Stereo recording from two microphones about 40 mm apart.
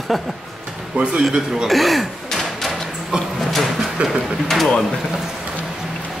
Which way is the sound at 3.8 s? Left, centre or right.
Centre.